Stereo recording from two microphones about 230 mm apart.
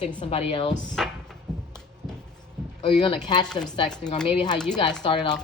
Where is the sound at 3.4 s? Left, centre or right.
Centre.